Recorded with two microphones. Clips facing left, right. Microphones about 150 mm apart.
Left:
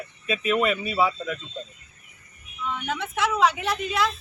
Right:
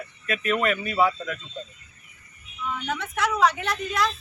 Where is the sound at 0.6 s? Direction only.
5° left (ahead or behind).